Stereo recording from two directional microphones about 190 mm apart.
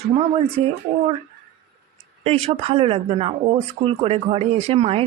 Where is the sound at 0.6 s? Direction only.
30° right (ahead or behind).